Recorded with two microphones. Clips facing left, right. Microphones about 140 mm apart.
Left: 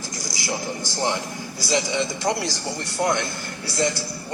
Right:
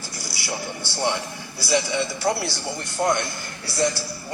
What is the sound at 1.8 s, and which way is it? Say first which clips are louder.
Speech: even; 15° left (ahead or behind).